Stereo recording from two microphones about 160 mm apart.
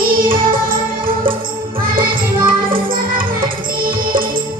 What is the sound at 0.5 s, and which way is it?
Music, 60° right (ahead or behind).